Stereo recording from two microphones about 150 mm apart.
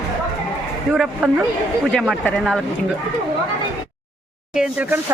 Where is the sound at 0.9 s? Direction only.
5° right (ahead or behind).